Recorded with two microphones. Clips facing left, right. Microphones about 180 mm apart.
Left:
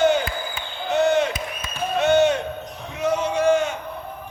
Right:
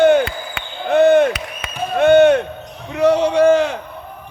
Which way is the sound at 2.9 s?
70° right (ahead or behind).